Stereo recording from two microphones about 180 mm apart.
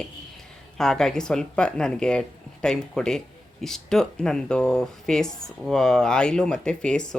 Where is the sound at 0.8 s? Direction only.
5° left (ahead or behind).